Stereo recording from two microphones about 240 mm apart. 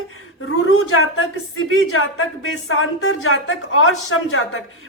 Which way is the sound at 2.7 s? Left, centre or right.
Left.